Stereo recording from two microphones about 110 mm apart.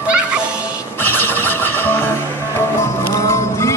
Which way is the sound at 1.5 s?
20° left (ahead or behind).